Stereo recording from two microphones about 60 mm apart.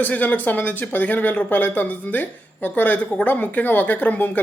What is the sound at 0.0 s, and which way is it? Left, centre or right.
A woman's voice, left.